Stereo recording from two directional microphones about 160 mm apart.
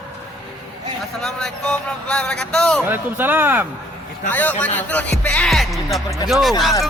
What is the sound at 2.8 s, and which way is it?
Speech, 10° right (ahead or behind).